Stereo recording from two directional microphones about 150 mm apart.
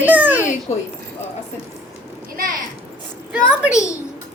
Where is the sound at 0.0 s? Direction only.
10° right (ahead or behind).